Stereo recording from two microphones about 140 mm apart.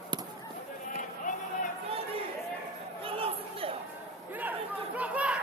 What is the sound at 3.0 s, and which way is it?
Chatter, 40° right (ahead or behind).